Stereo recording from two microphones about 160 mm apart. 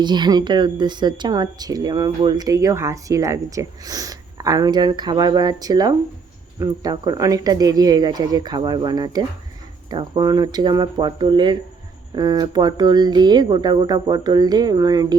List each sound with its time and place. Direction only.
0.0 s speech: 25° right (ahead or behind)